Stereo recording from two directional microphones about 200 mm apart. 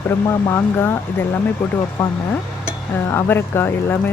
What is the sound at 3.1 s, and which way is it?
Speech, 10° left (ahead or behind).